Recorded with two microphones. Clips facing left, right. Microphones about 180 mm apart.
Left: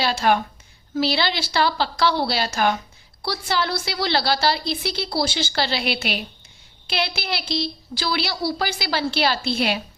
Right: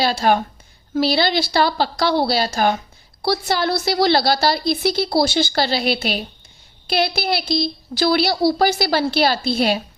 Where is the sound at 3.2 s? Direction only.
40° right (ahead or behind).